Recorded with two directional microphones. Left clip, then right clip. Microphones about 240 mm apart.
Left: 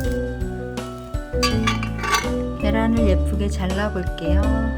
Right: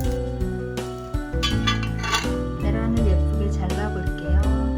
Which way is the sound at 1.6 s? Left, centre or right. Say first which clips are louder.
Left 2 dB; centre.